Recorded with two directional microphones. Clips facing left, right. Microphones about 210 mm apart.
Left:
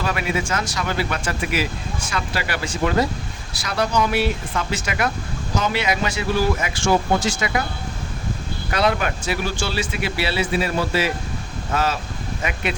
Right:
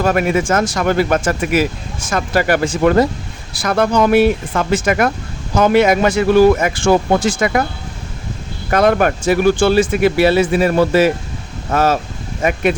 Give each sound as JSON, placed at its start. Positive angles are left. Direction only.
{"t": 0.0, "sound": "speech", "side_deg": -50}
{"t": 8.7, "sound": "speech", "side_deg": -50}